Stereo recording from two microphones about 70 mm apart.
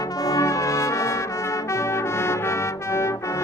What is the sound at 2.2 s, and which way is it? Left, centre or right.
Brass instrument, left.